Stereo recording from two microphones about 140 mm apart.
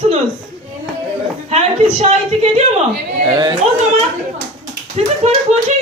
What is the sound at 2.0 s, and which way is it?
Speech, 50° right (ahead or behind).